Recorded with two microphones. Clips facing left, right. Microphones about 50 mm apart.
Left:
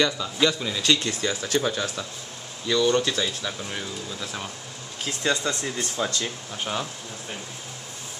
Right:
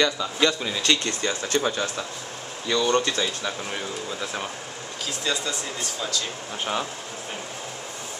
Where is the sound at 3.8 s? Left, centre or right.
Right.